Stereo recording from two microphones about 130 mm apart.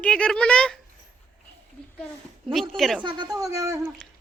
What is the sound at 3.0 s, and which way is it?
Speech, 35° right (ahead or behind).